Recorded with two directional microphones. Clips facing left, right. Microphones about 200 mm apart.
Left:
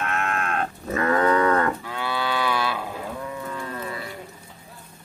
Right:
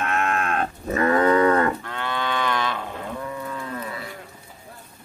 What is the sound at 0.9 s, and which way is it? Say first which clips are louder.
Livestock: right 2 dB; 20° right (ahead or behind).